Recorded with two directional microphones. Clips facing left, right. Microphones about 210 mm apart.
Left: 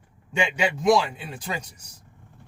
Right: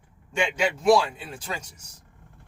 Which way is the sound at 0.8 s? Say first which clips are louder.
Right 1 dB; 15° left (ahead or behind).